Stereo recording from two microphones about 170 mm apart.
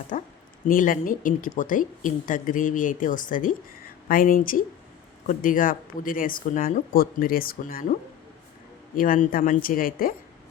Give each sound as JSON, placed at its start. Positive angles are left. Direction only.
{"t": 0.1, "sound": "speech", "side_deg": 50}
{"t": 9.0, "sound": "speech", "side_deg": 55}